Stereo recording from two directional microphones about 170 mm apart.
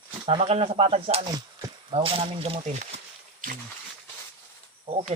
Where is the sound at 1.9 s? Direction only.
35° right (ahead or behind).